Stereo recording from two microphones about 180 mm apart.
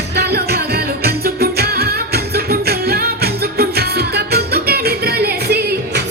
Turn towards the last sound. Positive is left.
turn(degrees=-60)  # may be behind; listen again after turning